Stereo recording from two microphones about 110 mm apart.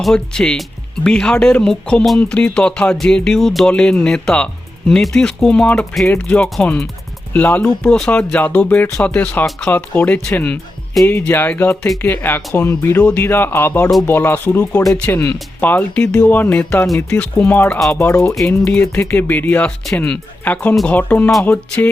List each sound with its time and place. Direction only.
0.0 s speech: 5° left (ahead or behind)
17.9 s speech: 25° left (ahead or behind)
18.4 s speech: 15° left (ahead or behind)